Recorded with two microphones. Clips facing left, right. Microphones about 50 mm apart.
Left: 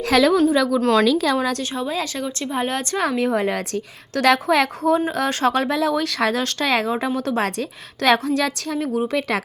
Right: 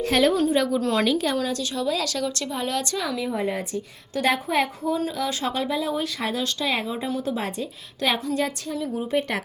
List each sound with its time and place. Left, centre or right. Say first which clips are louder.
0.0 s a woman's voice: left 4 dB; left
0.8 s a woman's voice: left 6 dB; left
1.7 s a woman's voice: left 1 dB; left
5.1 s a woman's voice: left 6 dB; left